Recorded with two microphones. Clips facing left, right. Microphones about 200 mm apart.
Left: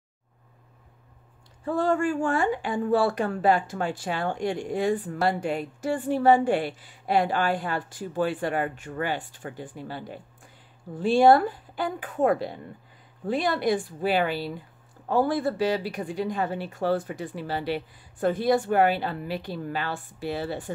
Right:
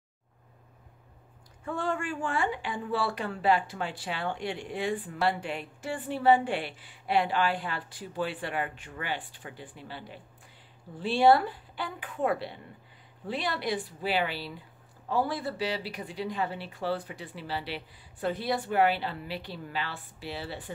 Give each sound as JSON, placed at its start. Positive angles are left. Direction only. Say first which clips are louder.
{"t": 1.6, "sound": "speech", "louder": "left 8 dB", "side_deg": 35}